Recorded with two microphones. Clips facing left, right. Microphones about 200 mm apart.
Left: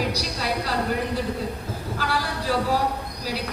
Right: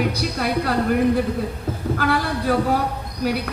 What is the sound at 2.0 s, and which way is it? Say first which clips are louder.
Speech: right 5 dB; 55° right (ahead or behind).